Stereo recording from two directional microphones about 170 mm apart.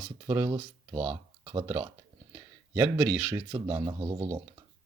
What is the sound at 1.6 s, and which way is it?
Speech, 15° right (ahead or behind).